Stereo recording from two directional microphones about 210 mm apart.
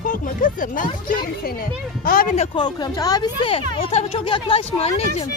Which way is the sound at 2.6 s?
20° left (ahead or behind).